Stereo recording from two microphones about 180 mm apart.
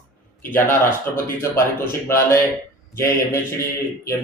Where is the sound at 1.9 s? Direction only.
15° left (ahead or behind).